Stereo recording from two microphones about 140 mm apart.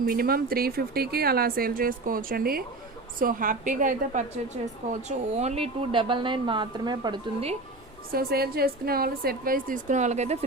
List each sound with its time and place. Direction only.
0.0 s speech: 90° right
3.2 s a woman's voice: 80° right; by 7.2 s 30° right (ahead or behind)
8.1 s speech: 90° right; by 10.3 s 55° right (ahead or behind)